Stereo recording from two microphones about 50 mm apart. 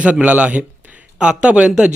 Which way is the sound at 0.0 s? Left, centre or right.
Right.